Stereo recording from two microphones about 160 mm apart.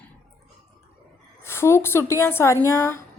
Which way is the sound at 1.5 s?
15° left (ahead or behind).